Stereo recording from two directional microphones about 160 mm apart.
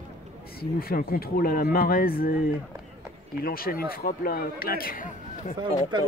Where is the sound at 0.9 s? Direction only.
65° left (ahead or behind).